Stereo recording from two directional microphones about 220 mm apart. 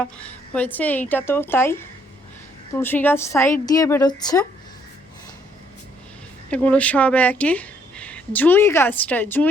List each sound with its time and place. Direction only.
0.0 s speech: 5° left (ahead or behind)
6.5 s speech: 5° left (ahead or behind)